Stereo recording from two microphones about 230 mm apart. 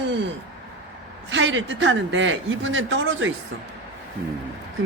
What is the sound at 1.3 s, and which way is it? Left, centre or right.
Speech, right.